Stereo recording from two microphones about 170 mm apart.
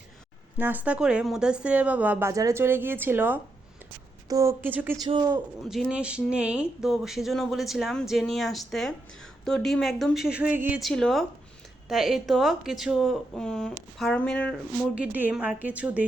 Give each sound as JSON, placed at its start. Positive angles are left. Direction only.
{"t": 0.5, "sound": "speech", "side_deg": -10}
{"t": 4.9, "sound": "speech", "side_deg": -25}
{"t": 5.6, "sound": "speech", "side_deg": 0}
{"t": 14.9, "sound": "speech", "side_deg": -10}